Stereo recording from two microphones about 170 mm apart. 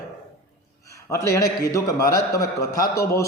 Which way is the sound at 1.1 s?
20° left (ahead or behind).